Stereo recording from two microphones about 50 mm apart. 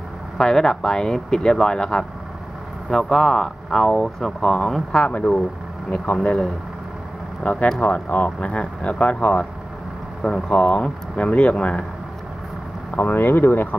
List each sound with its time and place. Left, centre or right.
0.4 s speech: centre
4.9 s speech: left
7.4 s speech: left
13.0 s speech: left